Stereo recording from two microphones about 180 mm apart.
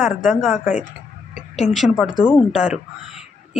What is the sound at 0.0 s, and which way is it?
Speech, centre (ahead or behind).